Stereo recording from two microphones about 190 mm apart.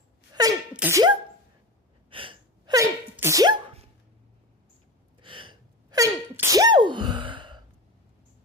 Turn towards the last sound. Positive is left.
turn(degrees=-25)  # may be behind; listen again after turning